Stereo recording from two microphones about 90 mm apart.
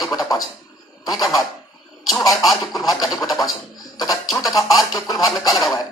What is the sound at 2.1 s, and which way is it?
Speech, 45° left (ahead or behind).